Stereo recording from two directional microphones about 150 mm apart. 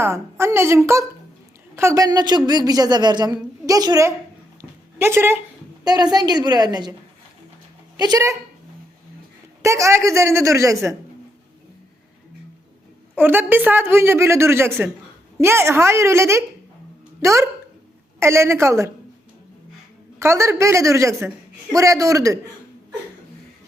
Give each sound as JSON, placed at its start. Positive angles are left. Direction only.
{"t": 0.0, "sound": "a woman's voice", "side_deg": -15}
{"t": 5.8, "sound": "a woman's voice", "side_deg": -25}
{"t": 7.9, "sound": "a woman's voice", "side_deg": -25}
{"t": 9.6, "sound": "a woman's voice", "side_deg": -20}
{"t": 13.1, "sound": "a woman's voice", "side_deg": -15}
{"t": 20.1, "sound": "a woman's voice", "side_deg": -20}